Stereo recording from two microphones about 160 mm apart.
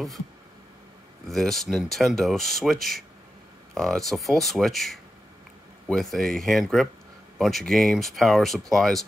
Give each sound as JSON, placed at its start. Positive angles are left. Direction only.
{"t": 1.3, "sound": "speech", "side_deg": 0}